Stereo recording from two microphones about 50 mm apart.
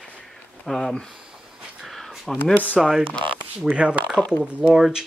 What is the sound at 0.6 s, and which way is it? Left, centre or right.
Speech, centre.